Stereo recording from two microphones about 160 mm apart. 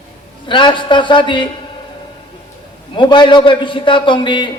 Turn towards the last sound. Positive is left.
turn(degrees=30)  # may be behind; listen again after turning